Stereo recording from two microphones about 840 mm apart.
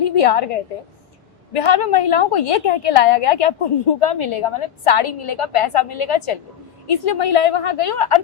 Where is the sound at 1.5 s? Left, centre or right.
Left.